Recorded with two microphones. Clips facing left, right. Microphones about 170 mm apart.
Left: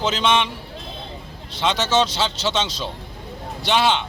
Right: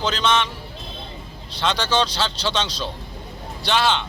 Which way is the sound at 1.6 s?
20° left (ahead or behind).